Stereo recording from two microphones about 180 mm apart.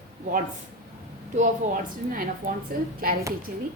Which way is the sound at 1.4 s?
50° right (ahead or behind).